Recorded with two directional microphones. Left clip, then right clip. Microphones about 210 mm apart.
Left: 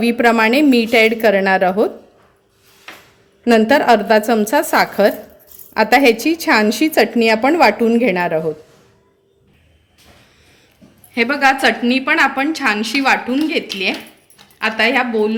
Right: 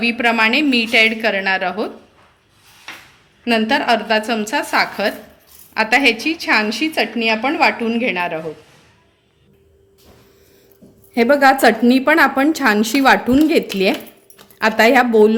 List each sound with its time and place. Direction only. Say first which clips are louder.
0.0 s a woman's voice: left 2 dB; 45° left (ahead or behind)
3.4 s a woman's voice: left 4 dB; 50° left (ahead or behind)
11.1 s a woman's voice: right 2 dB; 45° right (ahead or behind)